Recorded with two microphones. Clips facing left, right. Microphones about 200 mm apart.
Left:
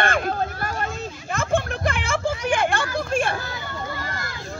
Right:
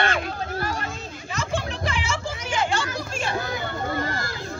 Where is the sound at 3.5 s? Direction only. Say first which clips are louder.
Right 4 dB; 25° right (ahead or behind).